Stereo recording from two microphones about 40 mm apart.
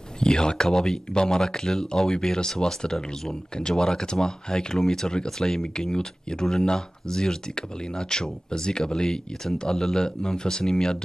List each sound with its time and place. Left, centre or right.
0.2 s speech: centre